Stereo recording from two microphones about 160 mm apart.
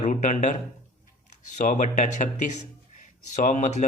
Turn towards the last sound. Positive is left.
turn(degrees=50)  # may be behind; listen again after turning